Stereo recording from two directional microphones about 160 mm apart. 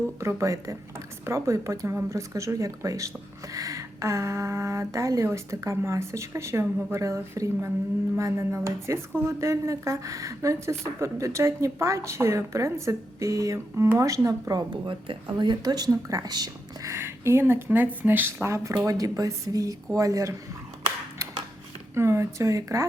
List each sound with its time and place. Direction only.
0.2 s a woman's voice: 20° right (ahead or behind)
21.9 s speech: 15° right (ahead or behind)